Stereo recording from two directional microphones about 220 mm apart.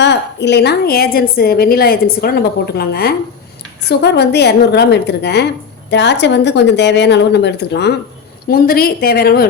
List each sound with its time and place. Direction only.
0.0 s a woman's voice: 50° left (ahead or behind)